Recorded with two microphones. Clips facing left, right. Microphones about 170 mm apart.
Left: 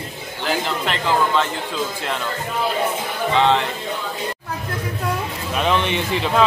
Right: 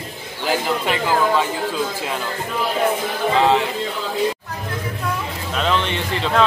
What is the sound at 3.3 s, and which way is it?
Speech, 5° right (ahead or behind).